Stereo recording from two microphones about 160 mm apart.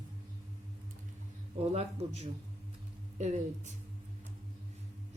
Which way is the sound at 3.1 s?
45° right (ahead or behind).